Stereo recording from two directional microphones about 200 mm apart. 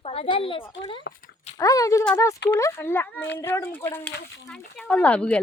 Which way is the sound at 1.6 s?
15° left (ahead or behind).